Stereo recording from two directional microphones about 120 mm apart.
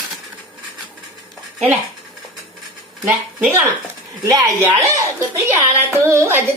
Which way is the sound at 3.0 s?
20° right (ahead or behind).